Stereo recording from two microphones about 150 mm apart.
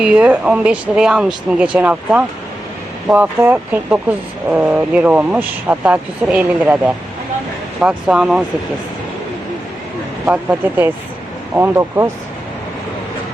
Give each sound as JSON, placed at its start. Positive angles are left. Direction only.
{"t": 0.0, "sound": "speech", "side_deg": -10}
{"t": 10.2, "sound": "speech", "side_deg": -10}